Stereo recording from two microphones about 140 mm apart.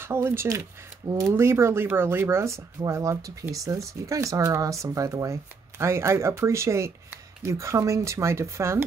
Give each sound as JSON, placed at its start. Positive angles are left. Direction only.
{"t": 0.0, "sound": "speech", "side_deg": -15}